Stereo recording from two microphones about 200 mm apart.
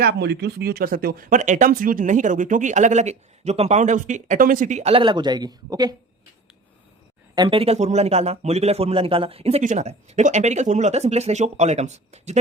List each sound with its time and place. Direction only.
0.0 s speech: 55° right (ahead or behind); by 5.9 s 20° right (ahead or behind)
7.3 s speech: 25° right (ahead or behind)